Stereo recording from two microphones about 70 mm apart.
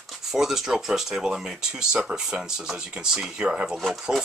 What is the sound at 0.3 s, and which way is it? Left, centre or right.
Speech, centre.